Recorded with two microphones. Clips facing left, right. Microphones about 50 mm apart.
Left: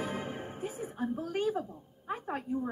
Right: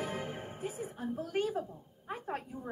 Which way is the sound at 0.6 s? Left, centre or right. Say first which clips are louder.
Left 3 dB; left.